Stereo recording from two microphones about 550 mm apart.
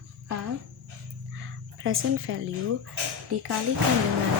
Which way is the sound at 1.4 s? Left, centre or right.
Right.